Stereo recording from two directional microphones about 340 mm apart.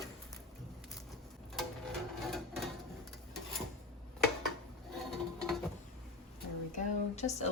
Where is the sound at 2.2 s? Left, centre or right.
Centre.